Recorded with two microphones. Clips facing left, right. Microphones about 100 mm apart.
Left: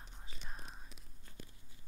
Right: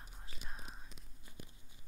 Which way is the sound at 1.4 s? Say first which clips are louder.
Even; 15° right (ahead or behind).